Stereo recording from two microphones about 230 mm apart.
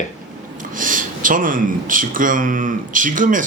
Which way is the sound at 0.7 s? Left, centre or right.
Right.